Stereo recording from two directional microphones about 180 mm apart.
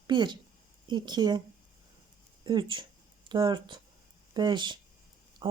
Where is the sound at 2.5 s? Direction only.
25° right (ahead or behind).